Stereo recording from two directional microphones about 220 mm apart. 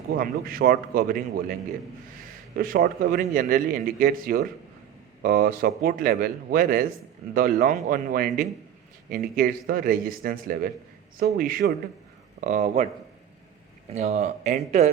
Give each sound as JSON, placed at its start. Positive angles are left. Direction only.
{"t": 0.1, "sound": "a man's voice", "side_deg": -40}
{"t": 2.6, "sound": "a man's voice", "side_deg": -40}
{"t": 13.9, "sound": "a man's voice", "side_deg": -30}